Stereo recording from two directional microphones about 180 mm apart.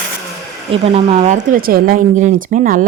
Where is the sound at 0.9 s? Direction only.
35° right (ahead or behind).